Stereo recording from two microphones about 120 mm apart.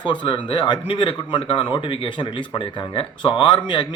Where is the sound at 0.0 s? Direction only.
40° left (ahead or behind).